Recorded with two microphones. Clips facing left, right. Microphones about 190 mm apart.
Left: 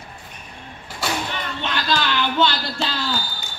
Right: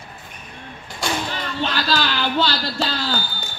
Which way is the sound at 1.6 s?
35° right (ahead or behind).